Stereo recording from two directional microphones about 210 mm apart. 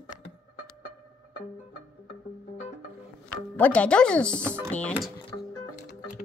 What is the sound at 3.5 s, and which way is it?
Speech, 5° left (ahead or behind).